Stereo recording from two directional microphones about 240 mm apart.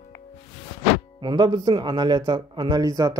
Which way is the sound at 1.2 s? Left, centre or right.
Centre.